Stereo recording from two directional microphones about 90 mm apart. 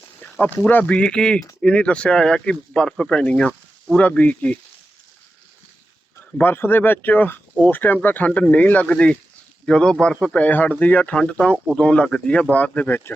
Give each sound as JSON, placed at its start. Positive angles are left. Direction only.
{"t": 0.2, "sound": "a sound", "side_deg": 20}
{"t": 0.7, "sound": "speech", "side_deg": 15}
{"t": 6.3, "sound": "speech", "side_deg": 25}
{"t": 10.4, "sound": "speech", "side_deg": 20}